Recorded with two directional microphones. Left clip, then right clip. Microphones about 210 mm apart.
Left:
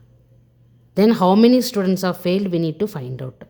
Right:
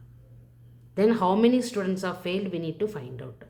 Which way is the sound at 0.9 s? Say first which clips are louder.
Left 7 dB; 55° left (ahead or behind).